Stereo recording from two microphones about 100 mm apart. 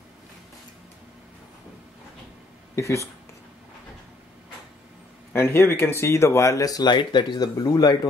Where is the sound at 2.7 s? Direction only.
30° left (ahead or behind).